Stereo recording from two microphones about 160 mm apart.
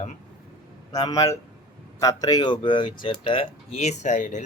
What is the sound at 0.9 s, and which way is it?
Speech, 25° left (ahead or behind).